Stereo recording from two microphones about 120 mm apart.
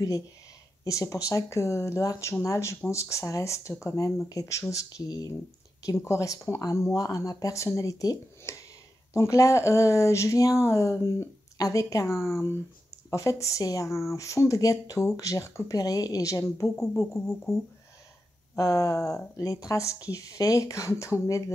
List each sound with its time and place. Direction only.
0.8 s speech: 25° left (ahead or behind)
17.0 s music: 5° left (ahead or behind)
18.6 s speech: 30° left (ahead or behind)